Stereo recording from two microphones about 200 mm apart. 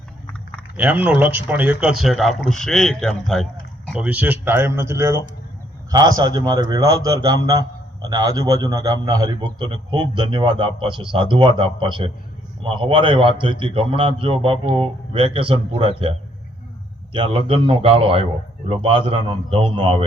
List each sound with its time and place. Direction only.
0.8 s a man's voice: 10° right (ahead or behind); by 20.1 s 25° right (ahead or behind)